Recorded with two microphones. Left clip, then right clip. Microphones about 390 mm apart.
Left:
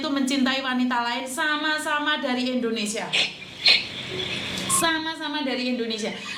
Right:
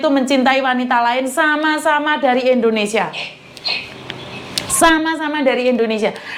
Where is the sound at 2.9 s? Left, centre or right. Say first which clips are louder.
Right 13 dB; right.